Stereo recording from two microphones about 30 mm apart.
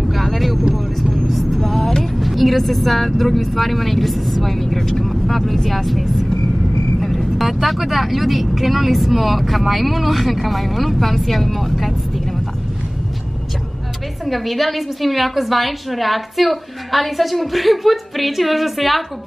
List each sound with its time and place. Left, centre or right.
0.1 s vehicle: centre
2.1 s speech: centre
14.2 s speech: centre